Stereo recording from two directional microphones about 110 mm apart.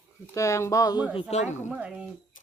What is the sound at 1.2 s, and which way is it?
Speech, 90° left.